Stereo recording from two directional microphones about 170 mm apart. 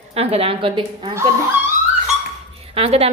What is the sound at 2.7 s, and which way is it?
Speech, 35° right (ahead or behind).